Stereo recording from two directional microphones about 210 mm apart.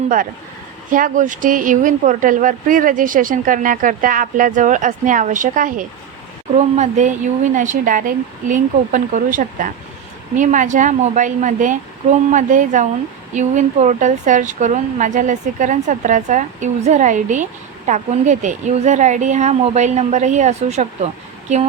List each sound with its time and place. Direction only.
0.9 s a woman's voice: 40° right (ahead or behind)